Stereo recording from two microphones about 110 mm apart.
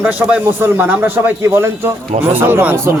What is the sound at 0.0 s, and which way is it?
A man's voice, 10° right (ahead or behind).